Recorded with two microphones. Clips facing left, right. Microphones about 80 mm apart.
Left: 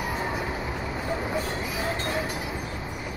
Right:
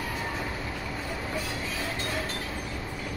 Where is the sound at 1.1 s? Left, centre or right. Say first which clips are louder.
Left 6 dB; centre.